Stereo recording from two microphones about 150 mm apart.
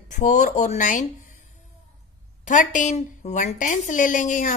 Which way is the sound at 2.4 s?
55° left (ahead or behind).